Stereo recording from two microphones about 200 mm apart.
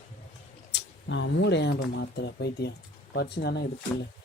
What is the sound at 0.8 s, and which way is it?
Speech, 65° left (ahead or behind).